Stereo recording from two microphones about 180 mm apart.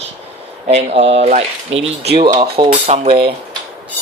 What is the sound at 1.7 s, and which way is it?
Speech, 90° right.